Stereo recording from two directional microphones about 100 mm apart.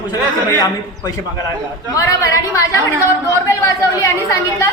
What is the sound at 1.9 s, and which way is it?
A woman's voice, 35° left (ahead or behind).